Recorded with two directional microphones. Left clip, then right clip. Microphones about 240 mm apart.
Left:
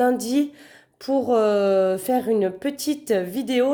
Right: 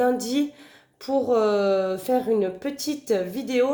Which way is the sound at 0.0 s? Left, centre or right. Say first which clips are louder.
Left 2 dB; left.